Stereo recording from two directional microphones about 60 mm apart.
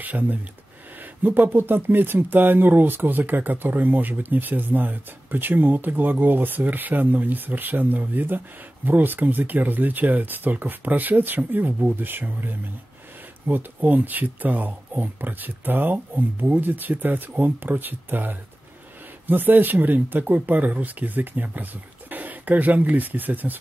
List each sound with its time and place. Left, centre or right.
0.0 s speech: right